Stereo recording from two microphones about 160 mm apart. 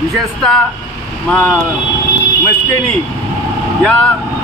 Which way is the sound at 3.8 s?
5° left (ahead or behind).